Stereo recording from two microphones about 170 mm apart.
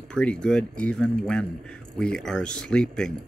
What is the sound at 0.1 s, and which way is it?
Speech, 5° left (ahead or behind).